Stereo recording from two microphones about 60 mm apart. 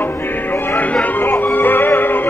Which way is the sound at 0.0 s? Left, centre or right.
Left.